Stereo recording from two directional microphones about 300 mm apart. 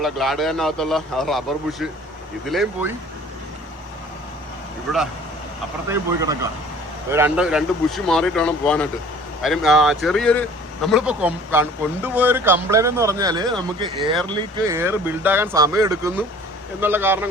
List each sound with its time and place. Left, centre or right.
0.0 s speech: centre
5.9 s speech: centre